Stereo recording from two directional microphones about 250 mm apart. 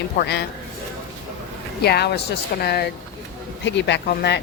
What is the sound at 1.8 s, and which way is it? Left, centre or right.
Speech, left.